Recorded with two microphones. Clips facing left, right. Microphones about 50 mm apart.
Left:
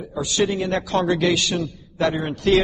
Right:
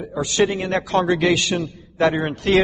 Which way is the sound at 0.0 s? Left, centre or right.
Right.